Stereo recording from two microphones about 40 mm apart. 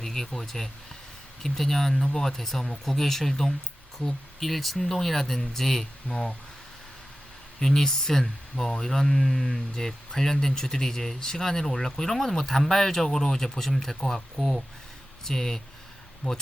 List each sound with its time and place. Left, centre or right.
0.0 s speech: centre
7.6 s speech: centre
15.2 s speech: centre
16.2 s speech: left